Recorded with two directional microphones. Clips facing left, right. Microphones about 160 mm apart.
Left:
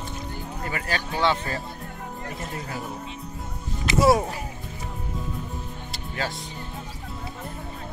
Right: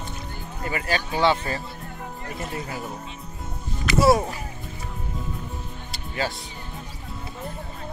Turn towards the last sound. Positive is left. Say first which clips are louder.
# right 2 dB
turn(degrees=-5)  # may be behind; listen again after turning